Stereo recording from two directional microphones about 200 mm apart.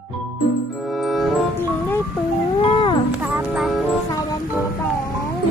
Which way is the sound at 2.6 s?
25° left (ahead or behind).